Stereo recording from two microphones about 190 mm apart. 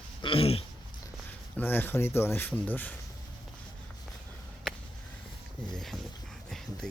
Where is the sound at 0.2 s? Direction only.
30° left (ahead or behind).